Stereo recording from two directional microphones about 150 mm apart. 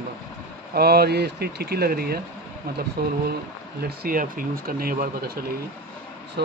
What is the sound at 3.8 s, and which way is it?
Speech, 80° right.